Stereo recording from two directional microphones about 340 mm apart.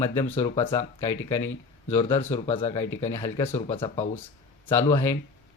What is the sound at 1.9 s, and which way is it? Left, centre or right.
Speech, centre.